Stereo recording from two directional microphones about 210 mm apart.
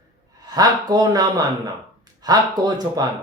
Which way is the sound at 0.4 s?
15° right (ahead or behind).